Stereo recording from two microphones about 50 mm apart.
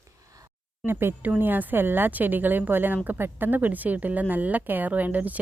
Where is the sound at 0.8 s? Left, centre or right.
Right.